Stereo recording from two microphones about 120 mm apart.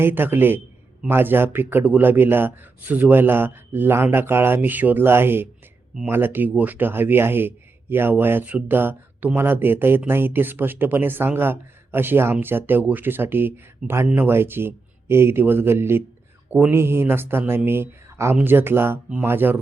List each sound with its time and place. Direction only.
0.0 s speech: 15° right (ahead or behind)